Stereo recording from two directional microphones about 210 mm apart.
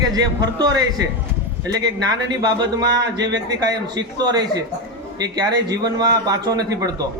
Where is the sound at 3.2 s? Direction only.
55° right (ahead or behind).